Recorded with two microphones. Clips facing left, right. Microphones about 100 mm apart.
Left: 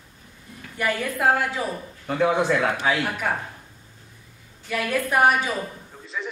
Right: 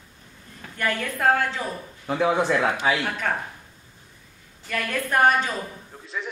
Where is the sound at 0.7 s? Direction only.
10° left (ahead or behind).